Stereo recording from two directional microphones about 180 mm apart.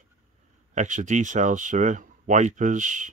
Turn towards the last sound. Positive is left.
turn(degrees=-45)  # may be behind; listen again after turning